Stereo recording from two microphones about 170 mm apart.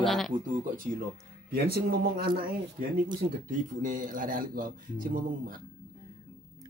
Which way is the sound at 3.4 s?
50° right (ahead or behind).